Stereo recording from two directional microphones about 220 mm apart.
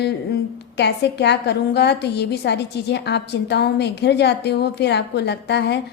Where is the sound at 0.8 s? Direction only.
50° left (ahead or behind).